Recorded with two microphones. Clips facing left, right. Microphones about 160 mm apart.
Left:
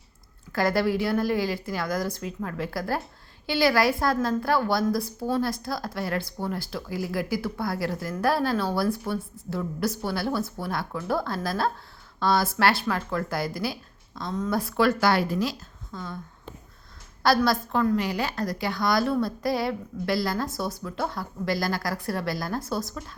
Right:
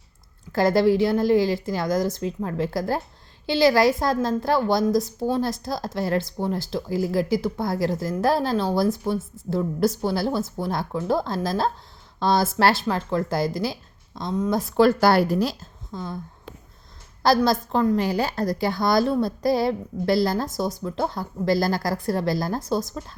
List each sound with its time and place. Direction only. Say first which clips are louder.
0.5 s a woman's voice: right 5 dB; 25° right (ahead or behind)
14.3 s speech: right 4 dB; 15° right (ahead or behind)
14.8 s speech: right 5 dB; 30° right (ahead or behind)
17.2 s a woman's voice: right 3 dB; 25° right (ahead or behind)